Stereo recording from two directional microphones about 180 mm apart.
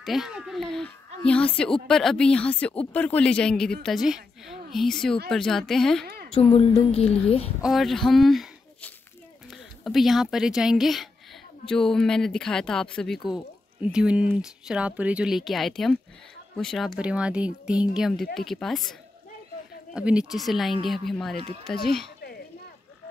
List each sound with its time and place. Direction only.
0.0 s a woman's voice: centre (ahead or behind)
6.5 s speech: 35° left (ahead or behind)
7.6 s a woman's voice: centre (ahead or behind)